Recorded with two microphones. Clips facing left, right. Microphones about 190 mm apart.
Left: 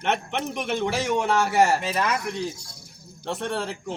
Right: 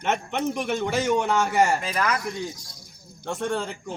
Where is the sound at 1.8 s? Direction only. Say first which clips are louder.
Left 1 dB; 25° left (ahead or behind).